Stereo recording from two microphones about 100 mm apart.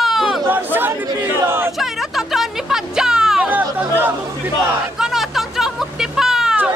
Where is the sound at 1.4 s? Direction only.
25° right (ahead or behind).